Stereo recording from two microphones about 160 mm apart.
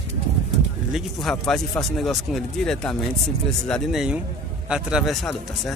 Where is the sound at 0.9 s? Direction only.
Centre (ahead or behind).